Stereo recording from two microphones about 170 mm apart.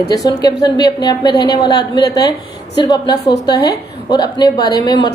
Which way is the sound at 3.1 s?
80° left.